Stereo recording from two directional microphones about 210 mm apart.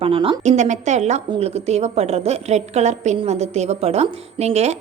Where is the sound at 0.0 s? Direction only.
25° right (ahead or behind).